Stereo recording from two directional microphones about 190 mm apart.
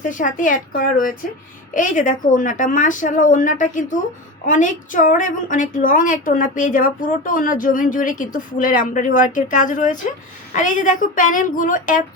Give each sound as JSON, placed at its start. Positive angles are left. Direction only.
{"t": 0.0, "sound": "a woman's voice", "side_deg": 45}